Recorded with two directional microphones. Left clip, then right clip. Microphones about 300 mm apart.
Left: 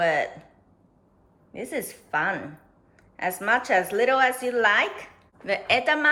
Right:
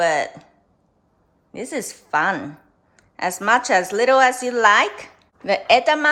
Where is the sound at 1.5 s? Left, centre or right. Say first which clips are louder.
Right 4 dB; centre.